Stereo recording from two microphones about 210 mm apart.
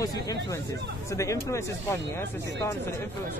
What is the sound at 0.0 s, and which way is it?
Speech, 15° left (ahead or behind).